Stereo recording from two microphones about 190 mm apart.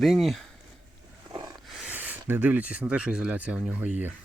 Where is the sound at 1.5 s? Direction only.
Centre (ahead or behind).